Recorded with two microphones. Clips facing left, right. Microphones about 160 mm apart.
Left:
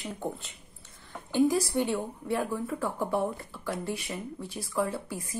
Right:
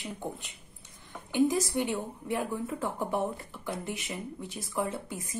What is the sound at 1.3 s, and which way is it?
Speech, 20° right (ahead or behind).